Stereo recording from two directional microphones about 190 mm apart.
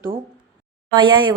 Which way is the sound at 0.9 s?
25° right (ahead or behind).